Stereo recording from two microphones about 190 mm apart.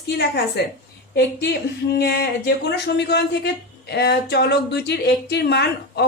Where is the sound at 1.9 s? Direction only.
55° left (ahead or behind).